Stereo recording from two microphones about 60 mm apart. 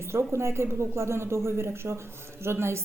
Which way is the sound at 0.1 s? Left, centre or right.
Right.